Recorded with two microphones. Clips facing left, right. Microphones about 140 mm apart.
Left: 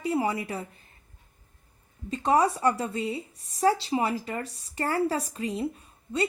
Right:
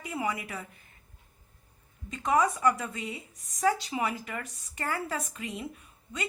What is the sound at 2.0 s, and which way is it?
A woman's voice, 30° left (ahead or behind).